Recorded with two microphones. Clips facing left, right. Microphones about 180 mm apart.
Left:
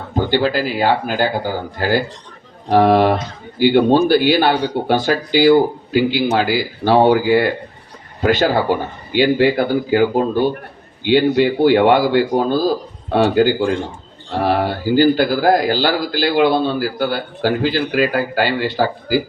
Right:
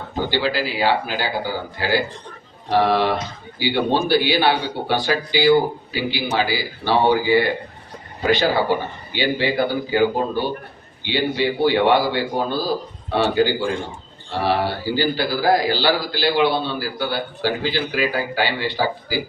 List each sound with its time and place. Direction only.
0.3 s a man's voice: 45° left (ahead or behind)